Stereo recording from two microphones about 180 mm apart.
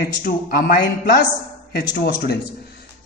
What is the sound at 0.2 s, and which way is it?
A man's voice, 50° left (ahead or behind).